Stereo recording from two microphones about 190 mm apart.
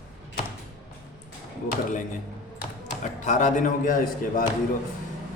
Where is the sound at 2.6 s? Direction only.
40° left (ahead or behind).